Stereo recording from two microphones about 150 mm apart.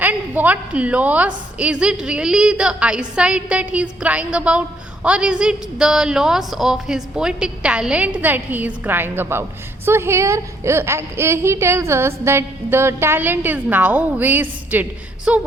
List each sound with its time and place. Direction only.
0.0 s a woman's voice: 10° right (ahead or behind)